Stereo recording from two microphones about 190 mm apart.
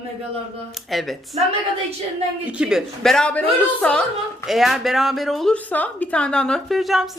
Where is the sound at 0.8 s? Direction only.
Centre (ahead or behind).